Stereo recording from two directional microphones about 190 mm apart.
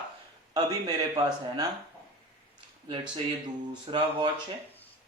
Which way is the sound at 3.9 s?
25° right (ahead or behind).